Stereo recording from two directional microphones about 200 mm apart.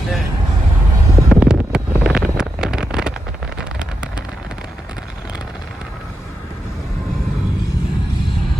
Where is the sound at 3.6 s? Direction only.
5° right (ahead or behind).